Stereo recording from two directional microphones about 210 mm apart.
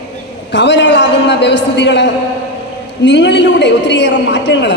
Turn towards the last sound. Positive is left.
turn(degrees=60)  # may be behind; listen again after turning